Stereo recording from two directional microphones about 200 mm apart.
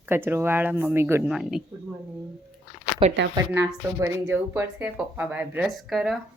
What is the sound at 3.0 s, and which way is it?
Speech, 30° right (ahead or behind).